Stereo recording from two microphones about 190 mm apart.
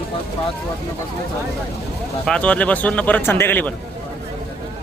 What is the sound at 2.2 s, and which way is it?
Speech, 5° left (ahead or behind).